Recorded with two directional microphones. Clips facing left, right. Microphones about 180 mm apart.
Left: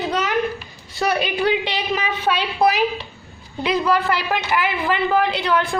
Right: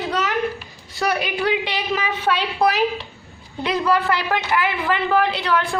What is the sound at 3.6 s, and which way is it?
A woman's voice, 15° left (ahead or behind).